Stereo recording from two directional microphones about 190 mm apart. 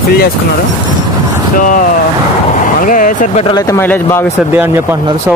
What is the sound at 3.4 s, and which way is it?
Speech, 20° left (ahead or behind).